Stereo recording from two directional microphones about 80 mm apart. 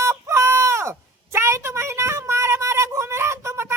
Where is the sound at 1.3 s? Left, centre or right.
Right.